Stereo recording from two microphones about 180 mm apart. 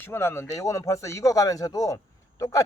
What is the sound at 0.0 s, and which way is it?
Speech, 15° left (ahead or behind).